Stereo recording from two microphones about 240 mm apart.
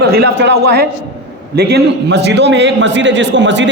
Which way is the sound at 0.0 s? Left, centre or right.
Right.